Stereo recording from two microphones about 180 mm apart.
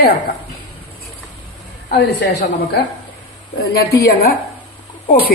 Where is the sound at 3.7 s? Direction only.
60° left (ahead or behind).